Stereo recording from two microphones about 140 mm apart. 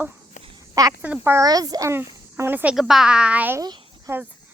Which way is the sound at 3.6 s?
25° right (ahead or behind).